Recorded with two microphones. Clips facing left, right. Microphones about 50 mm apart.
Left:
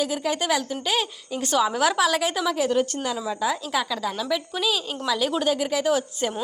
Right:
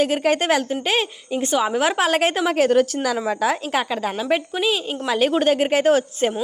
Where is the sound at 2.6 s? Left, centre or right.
Right.